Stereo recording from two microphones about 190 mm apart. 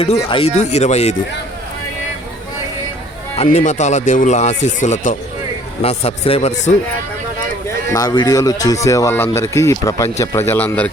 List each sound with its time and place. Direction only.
0.0 s speech: 30° left (ahead or behind)
3.3 s speech: 35° left (ahead or behind)
7.9 s speech: 20° left (ahead or behind)